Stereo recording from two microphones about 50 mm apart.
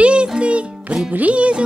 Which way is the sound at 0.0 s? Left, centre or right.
Right.